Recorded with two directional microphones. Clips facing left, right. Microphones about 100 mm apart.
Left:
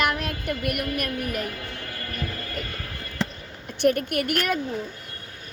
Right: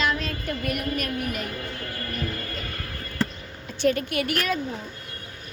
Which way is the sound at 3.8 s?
55° left (ahead or behind).